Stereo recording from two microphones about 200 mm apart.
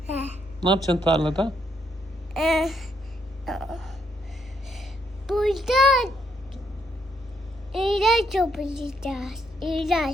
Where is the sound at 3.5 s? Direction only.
Centre (ahead or behind).